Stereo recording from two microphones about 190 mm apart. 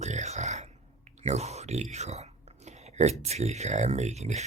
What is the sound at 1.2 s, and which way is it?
Speech, 35° right (ahead or behind).